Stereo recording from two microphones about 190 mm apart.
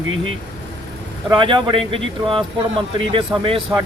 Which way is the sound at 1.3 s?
25° right (ahead or behind).